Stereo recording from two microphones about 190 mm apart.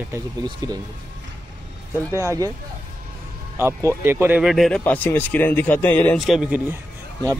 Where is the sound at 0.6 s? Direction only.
20° right (ahead or behind).